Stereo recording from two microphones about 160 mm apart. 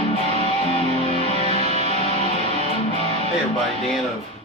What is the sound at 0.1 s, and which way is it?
Music, 40° left (ahead or behind).